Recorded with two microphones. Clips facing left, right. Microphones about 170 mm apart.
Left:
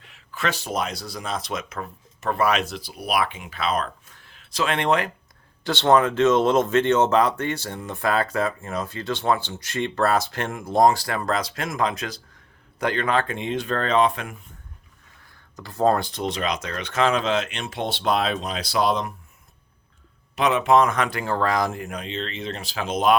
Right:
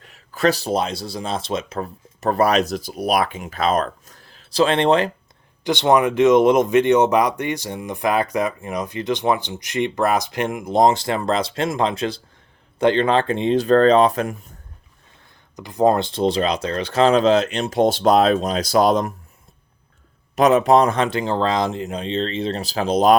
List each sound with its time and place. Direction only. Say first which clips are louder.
0.0 s speech: right 9 dB; 40° right (ahead or behind)
5.6 s speech: right 2 dB; 15° right (ahead or behind); by 14.5 s 40° right (ahead or behind)
15.5 s speech: right 4 dB; 15° right (ahead or behind); by 19.1 s 45° right (ahead or behind)
20.3 s speech: right 5 dB; 40° right (ahead or behind)